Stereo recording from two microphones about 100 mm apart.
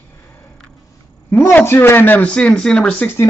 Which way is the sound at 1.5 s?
20° left (ahead or behind).